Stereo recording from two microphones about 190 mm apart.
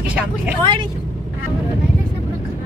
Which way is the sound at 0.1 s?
5° right (ahead or behind).